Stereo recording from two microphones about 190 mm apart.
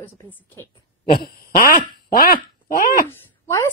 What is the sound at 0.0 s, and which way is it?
Speech, 10° left (ahead or behind).